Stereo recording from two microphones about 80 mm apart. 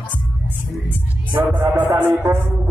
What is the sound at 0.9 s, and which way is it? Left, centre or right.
Speech, right.